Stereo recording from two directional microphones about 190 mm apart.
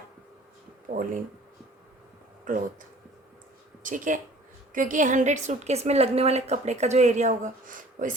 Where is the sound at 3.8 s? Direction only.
45° right (ahead or behind).